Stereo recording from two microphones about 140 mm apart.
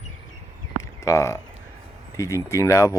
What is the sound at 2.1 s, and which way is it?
Speech, 20° left (ahead or behind).